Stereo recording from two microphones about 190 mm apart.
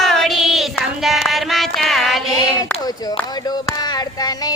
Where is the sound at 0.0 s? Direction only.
Centre (ahead or behind).